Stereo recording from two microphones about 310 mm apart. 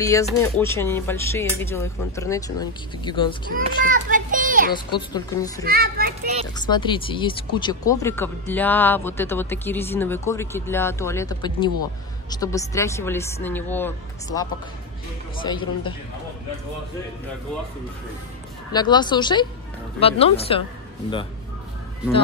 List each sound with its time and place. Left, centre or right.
0.0 s speech: centre
3.5 s a child's voice: right
4.7 s speech: centre
5.6 s a child's voice: right
6.4 s speech: centre
18.7 s speech: centre